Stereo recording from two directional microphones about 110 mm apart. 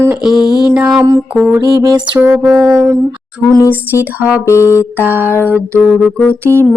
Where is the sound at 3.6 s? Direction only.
25° left (ahead or behind).